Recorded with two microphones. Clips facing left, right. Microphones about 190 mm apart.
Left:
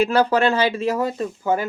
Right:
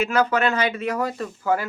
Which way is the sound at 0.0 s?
35° left (ahead or behind).